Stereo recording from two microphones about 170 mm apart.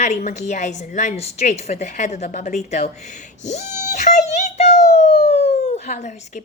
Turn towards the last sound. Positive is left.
turn(degrees=45)  # may be behind; listen again after turning